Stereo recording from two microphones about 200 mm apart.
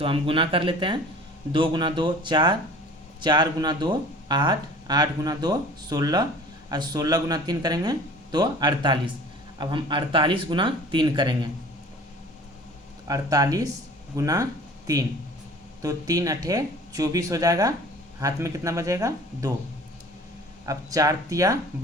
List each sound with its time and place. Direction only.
0.0 s speech: 25° right (ahead or behind)
13.1 s speech: 15° right (ahead or behind)
15.8 s speech: 15° right (ahead or behind)
20.7 s speech: 15° right (ahead or behind)